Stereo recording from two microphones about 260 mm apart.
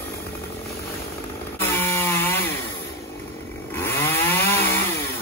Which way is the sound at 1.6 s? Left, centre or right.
Centre.